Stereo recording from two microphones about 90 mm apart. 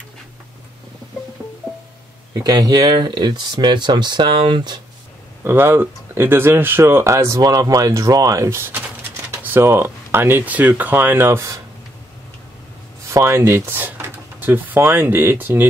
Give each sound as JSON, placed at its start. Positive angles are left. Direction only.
{"t": 1.4, "sound": "music", "side_deg": -5}
{"t": 2.3, "sound": "speech", "side_deg": -45}
{"t": 5.4, "sound": "speech", "side_deg": -25}
{"t": 13.1, "sound": "speech", "side_deg": -30}